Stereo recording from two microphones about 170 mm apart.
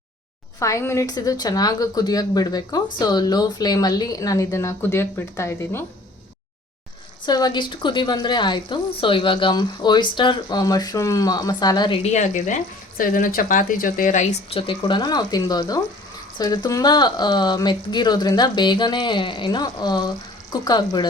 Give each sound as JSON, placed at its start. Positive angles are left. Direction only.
{"t": 0.6, "sound": "a woman's voice", "side_deg": 15}
{"t": 7.3, "sound": "a woman's voice", "side_deg": 25}
{"t": 12.0, "sound": "speech", "side_deg": 45}
{"t": 14.7, "sound": "a woman's voice", "side_deg": 25}